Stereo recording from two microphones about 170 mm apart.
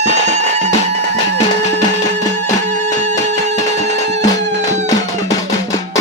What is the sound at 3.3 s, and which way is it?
Music, 40° right (ahead or behind).